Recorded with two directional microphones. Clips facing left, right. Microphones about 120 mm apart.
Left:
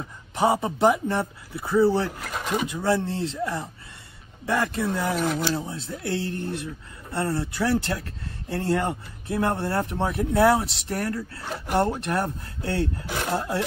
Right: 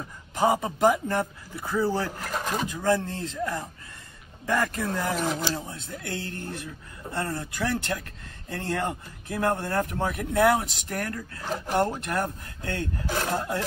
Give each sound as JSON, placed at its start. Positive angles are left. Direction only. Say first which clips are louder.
{"t": 0.4, "sound": "speech", "louder": "left 1 dB", "side_deg": 25}
{"t": 2.0, "sound": "speech", "louder": "left 1 dB", "side_deg": 5}
{"t": 2.8, "sound": "speech", "louder": "even", "side_deg": 30}
{"t": 5.5, "sound": "speech", "louder": "left 4 dB", "side_deg": 20}
{"t": 5.8, "sound": "speech", "louder": "left 6 dB", "side_deg": 30}
{"t": 11.5, "sound": "speech", "louder": "left 1 dB", "side_deg": 5}
{"t": 12.0, "sound": "speech", "louder": "left 2 dB", "side_deg": 30}
{"t": 13.1, "sound": "speech", "louder": "right 1 dB", "side_deg": 10}